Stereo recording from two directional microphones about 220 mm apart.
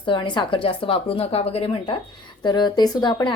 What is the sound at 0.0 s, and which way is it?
A woman's voice, 20° left (ahead or behind).